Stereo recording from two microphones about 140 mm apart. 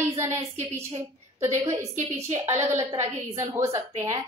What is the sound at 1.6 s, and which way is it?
Speech, 20° right (ahead or behind).